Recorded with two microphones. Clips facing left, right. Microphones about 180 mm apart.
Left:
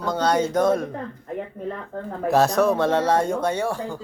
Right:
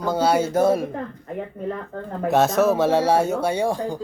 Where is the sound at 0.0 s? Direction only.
5° right (ahead or behind).